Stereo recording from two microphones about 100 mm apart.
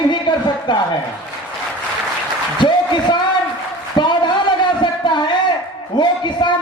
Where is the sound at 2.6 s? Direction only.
50° left (ahead or behind).